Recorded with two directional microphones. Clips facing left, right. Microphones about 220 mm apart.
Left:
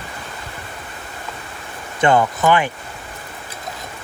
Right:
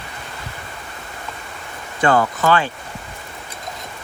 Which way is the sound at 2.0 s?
20° left (ahead or behind).